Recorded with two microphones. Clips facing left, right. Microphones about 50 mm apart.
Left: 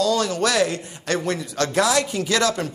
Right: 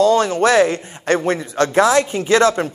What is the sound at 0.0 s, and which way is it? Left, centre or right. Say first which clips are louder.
Speech: right 7 dB; right.